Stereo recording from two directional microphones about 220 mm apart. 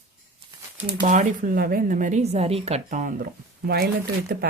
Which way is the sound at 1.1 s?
35° right (ahead or behind).